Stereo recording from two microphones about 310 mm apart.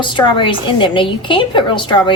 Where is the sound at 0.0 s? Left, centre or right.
Centre.